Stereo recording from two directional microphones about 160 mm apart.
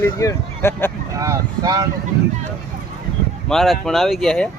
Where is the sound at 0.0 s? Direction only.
15° left (ahead or behind).